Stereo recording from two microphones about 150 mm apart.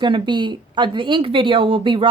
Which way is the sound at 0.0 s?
30° right (ahead or behind).